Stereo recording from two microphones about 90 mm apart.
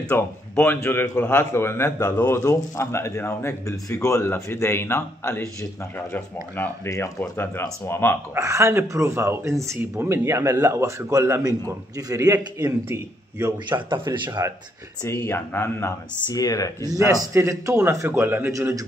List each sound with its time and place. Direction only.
0.1 s speech: 20° left (ahead or behind)
8.4 s a man's voice: 35° right (ahead or behind)
13.7 s speech: 60° right (ahead or behind)
15.0 s speech: 25° left (ahead or behind)
16.3 s speech: 40° left (ahead or behind)
16.9 s a man's voice: 40° right (ahead or behind)